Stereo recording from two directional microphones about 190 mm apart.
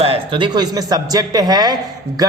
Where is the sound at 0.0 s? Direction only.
30° right (ahead or behind).